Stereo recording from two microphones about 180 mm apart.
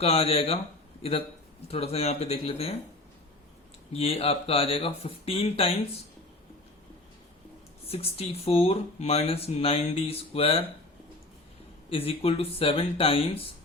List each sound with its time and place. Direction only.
0.0 s speech: 35° left (ahead or behind)
1.6 s speech: 35° left (ahead or behind)
3.9 s speech: 30° left (ahead or behind)
7.9 s speech: 35° left (ahead or behind)
11.9 s speech: 30° left (ahead or behind)